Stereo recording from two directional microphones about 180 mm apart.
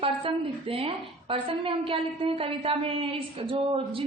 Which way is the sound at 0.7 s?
30° right (ahead or behind).